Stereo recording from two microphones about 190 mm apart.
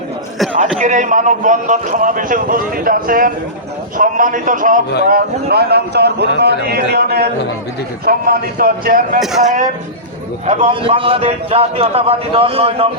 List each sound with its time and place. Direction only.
0.8 s a man's voice: 40° right (ahead or behind)